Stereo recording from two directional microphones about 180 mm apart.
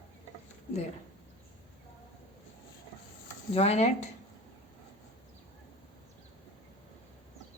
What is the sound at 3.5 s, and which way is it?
Speech, 35° left (ahead or behind).